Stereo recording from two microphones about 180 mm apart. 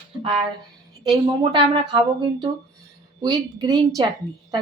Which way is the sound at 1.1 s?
25° right (ahead or behind).